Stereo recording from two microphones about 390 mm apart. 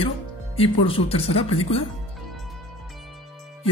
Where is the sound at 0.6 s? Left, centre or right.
Centre.